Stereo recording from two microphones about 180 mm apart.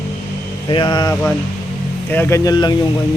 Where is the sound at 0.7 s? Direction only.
25° left (ahead or behind).